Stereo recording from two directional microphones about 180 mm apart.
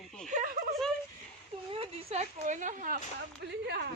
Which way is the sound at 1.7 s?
35° right (ahead or behind).